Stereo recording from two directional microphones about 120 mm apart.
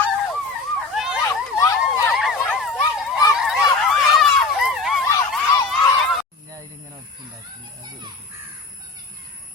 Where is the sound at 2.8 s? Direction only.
30° left (ahead or behind).